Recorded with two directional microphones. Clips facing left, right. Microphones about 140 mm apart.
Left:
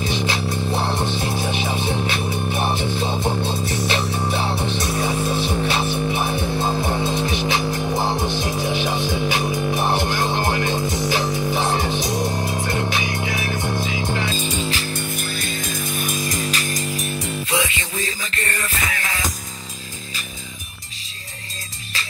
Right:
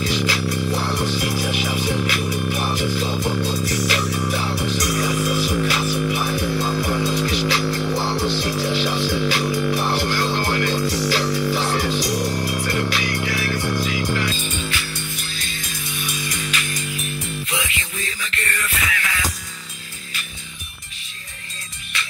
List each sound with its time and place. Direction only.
0.0 s music: 25° left (ahead or behind)
14.3 s music: 35° left (ahead or behind)